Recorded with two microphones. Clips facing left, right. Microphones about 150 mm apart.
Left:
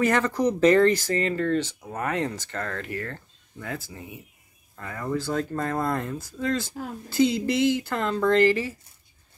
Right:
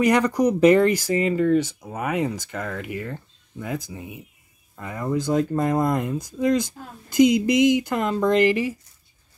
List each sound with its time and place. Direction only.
0.0 s speech: 15° right (ahead or behind)